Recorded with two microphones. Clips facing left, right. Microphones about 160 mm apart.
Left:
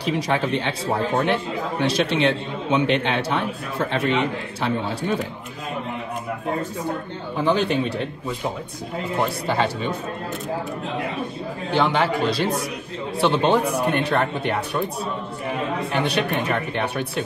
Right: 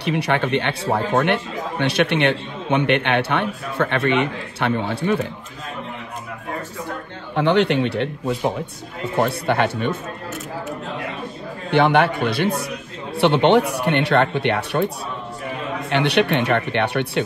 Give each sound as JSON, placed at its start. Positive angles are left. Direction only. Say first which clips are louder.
{"t": 0.0, "sound": "a man's voice", "louder": "right 2 dB", "side_deg": -65}
{"t": 7.3, "sound": "speech", "louder": "right 3 dB", "side_deg": -70}
{"t": 9.5, "sound": "a man's voice", "louder": "right 3 dB", "side_deg": -60}
{"t": 11.7, "sound": "a man's voice", "louder": "right 4 dB", "side_deg": -60}
{"t": 13.2, "sound": "speech", "louder": "right 4 dB", "side_deg": -70}
{"t": 15.9, "sound": "speech", "louder": "right 7 dB", "side_deg": -70}